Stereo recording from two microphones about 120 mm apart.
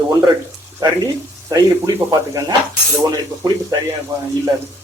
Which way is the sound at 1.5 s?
30° right (ahead or behind).